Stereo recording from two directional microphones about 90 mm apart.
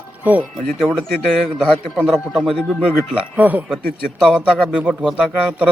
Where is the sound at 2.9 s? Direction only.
15° right (ahead or behind).